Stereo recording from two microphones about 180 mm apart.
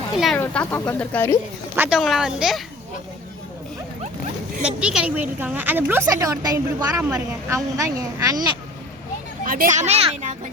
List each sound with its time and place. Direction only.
0.3 s speech: 10° left (ahead or behind)
1.7 s a woman's voice: 10° right (ahead or behind)
4.6 s a woman's voice: 5° right (ahead or behind); by 8.4 s 20° right (ahead or behind)
9.4 s speech: 50° right (ahead or behind)